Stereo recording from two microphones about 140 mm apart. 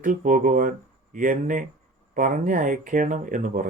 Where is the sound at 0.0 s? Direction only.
70° right (ahead or behind).